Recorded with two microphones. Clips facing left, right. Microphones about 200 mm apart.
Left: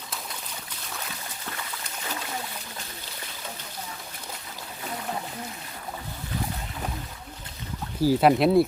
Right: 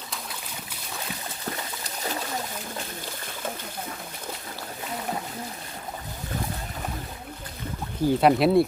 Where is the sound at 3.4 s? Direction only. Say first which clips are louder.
Right 8 dB; 50° right (ahead or behind).